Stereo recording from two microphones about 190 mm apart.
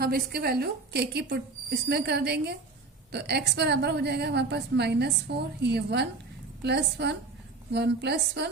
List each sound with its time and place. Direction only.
0.0 s a woman's voice: 55° right (ahead or behind)